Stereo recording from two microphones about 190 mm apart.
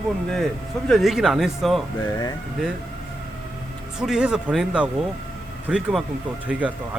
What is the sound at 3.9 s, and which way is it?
Speech, 5° right (ahead or behind).